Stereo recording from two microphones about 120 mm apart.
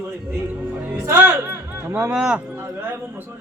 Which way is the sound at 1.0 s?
20° right (ahead or behind).